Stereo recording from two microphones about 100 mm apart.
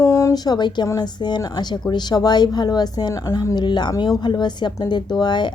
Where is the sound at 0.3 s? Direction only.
45° left (ahead or behind).